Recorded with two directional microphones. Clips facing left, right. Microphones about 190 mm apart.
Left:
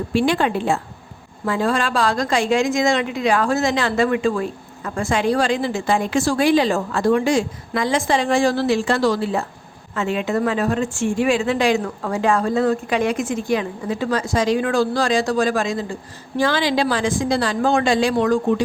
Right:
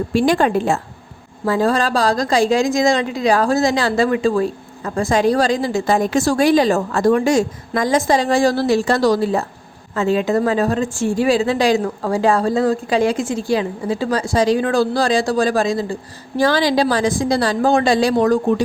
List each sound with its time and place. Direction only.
0.1 s a woman's voice: 40° right (ahead or behind)